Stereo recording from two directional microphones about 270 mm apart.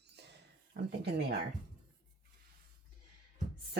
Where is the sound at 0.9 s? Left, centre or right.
Right.